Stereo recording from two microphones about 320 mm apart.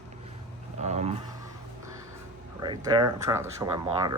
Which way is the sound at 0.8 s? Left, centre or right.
Right.